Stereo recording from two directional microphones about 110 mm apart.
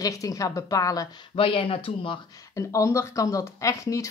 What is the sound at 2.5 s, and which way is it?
Speech, 30° left (ahead or behind).